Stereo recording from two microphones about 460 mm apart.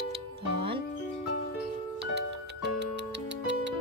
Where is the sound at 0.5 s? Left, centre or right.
Centre.